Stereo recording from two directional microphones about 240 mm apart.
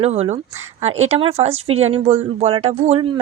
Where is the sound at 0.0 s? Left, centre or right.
Right.